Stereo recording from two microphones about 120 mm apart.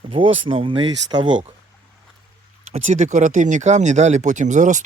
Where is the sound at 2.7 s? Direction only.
90° right.